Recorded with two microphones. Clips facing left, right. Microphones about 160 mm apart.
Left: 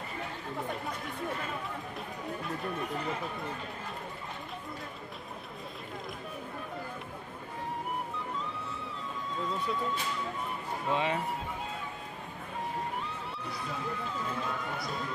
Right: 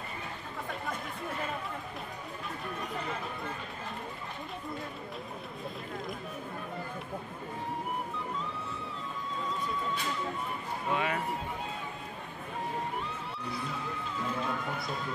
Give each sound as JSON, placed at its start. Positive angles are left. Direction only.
{"t": 10.9, "sound": "speech", "side_deg": 25}